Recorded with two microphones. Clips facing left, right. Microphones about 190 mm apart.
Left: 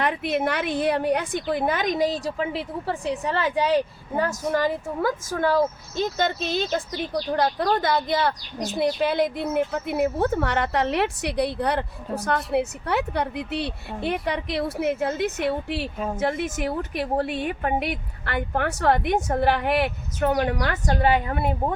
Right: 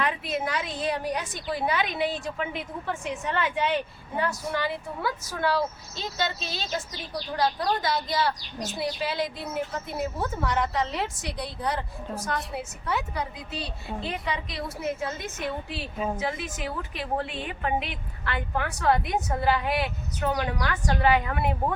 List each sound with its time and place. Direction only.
0.1 s a woman's voice: 65° left (ahead or behind); by 21.4 s 35° left (ahead or behind)